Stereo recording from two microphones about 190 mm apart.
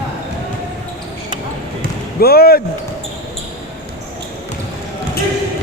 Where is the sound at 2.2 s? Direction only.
55° left (ahead or behind).